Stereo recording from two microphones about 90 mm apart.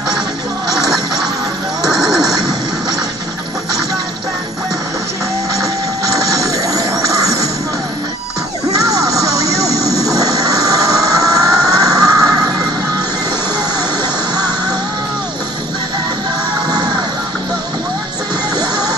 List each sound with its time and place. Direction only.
1.8 s neigh: 5° right (ahead or behind)
6.1 s music: 40° right (ahead or behind)
8.7 s a sound: 40° right (ahead or behind)
18.6 s music: 45° right (ahead or behind)